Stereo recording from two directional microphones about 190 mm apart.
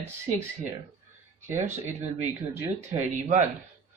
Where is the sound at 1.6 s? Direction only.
40° right (ahead or behind).